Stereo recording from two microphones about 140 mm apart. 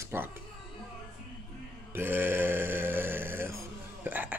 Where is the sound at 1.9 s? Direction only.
15° right (ahead or behind).